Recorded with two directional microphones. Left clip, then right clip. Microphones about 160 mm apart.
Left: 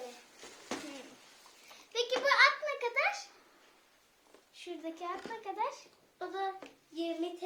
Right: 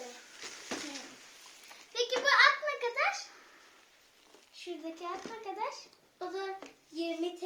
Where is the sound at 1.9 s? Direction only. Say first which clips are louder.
Right 1 dB; 40° left (ahead or behind).